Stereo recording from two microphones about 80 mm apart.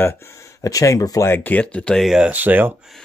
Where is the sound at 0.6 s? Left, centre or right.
Left.